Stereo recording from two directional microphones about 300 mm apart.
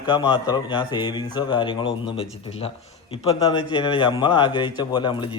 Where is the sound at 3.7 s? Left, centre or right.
Centre.